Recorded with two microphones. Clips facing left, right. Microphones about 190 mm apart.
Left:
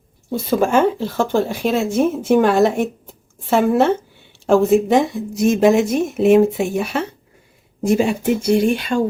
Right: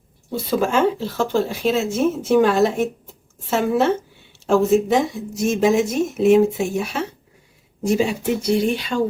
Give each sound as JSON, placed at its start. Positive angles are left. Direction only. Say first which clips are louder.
{"t": 0.3, "sound": "speech", "louder": "left 3 dB", "side_deg": 55}